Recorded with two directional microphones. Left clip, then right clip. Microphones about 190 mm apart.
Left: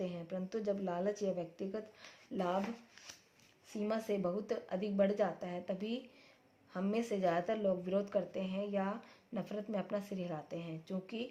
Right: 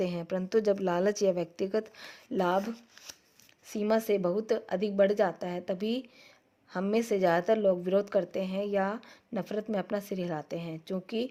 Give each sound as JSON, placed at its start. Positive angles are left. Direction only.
{"t": 0.0, "sound": "a woman's voice", "side_deg": -45}
{"t": 3.7, "sound": "a woman's voice", "side_deg": -40}